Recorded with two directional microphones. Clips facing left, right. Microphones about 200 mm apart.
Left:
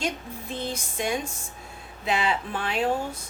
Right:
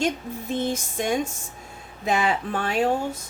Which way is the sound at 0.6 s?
45° right (ahead or behind).